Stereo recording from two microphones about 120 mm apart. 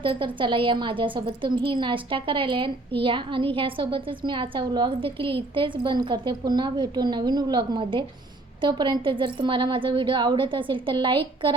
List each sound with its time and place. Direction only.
0.0 s a woman's voice: 45° right (ahead or behind)